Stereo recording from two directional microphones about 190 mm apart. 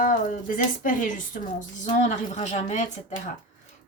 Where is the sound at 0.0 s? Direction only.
45° left (ahead or behind).